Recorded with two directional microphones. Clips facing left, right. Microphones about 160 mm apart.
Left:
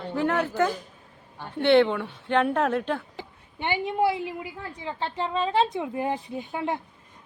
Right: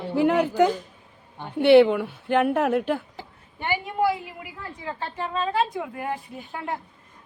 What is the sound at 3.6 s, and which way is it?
A woman's voice, 20° left (ahead or behind).